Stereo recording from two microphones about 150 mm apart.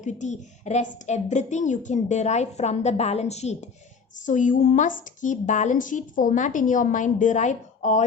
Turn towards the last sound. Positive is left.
turn(degrees=55)  # may be behind; listen again after turning